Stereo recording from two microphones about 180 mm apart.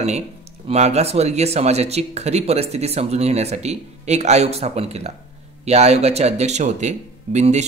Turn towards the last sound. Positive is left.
turn(degrees=-40)  # may be behind; listen again after turning